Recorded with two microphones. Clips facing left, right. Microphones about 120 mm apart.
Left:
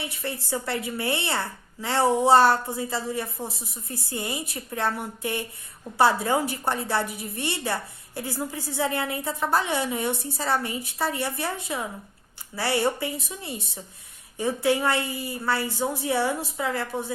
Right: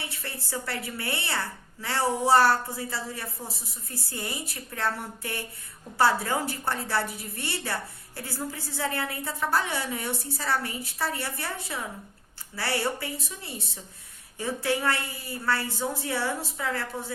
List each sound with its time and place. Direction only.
0.0 s a woman's voice: 15° left (ahead or behind)